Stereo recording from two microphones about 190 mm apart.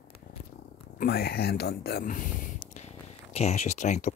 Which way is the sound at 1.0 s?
55° left (ahead or behind).